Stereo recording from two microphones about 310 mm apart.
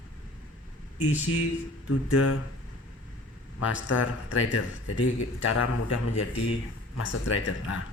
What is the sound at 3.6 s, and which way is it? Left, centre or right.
Speech, left.